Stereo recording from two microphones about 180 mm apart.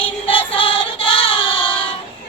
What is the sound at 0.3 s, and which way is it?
Music, 30° left (ahead or behind).